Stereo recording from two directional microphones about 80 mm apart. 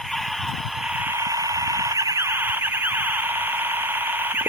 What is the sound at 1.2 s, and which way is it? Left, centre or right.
Alarm, right.